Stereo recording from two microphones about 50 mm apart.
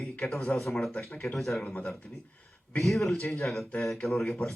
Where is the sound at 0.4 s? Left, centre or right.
Centre.